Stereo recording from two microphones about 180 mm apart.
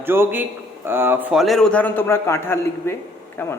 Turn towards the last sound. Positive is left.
turn(degrees=10)  # may be behind; listen again after turning